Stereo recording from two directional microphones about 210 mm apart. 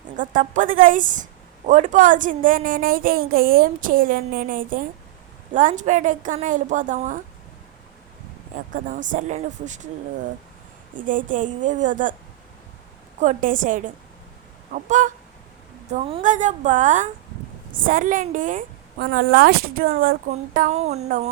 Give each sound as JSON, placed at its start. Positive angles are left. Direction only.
{"t": 0.2, "sound": "a woman's voice", "side_deg": -40}
{"t": 8.7, "sound": "a woman's voice", "side_deg": -40}
{"t": 10.9, "sound": "a woman's voice", "side_deg": -40}
{"t": 13.1, "sound": "a woman's voice", "side_deg": -35}